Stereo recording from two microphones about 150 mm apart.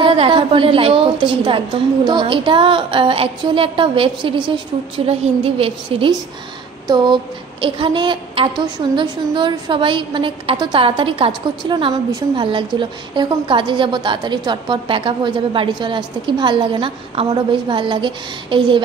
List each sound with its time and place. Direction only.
0.0 s a woman's voice: 35° right (ahead or behind)
7.6 s a woman's voice: 35° right (ahead or behind)